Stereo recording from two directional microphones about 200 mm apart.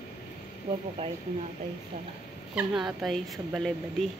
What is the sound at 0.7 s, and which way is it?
Speech, 25° right (ahead or behind).